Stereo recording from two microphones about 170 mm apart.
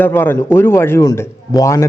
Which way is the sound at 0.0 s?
10° left (ahead or behind).